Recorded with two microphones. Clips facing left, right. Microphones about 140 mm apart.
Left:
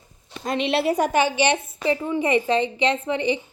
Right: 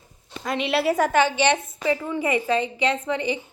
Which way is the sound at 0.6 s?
25° left (ahead or behind).